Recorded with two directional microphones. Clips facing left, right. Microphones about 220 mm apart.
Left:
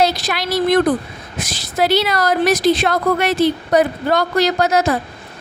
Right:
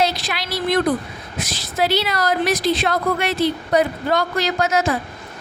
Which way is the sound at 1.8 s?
45° left (ahead or behind).